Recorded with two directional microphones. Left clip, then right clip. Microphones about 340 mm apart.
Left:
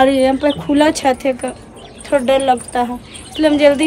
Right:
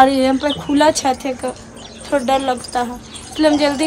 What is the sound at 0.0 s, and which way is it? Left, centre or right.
Speech, centre.